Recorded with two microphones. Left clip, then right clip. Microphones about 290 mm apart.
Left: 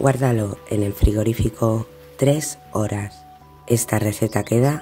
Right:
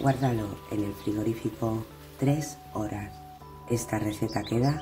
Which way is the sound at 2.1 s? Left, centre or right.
Left.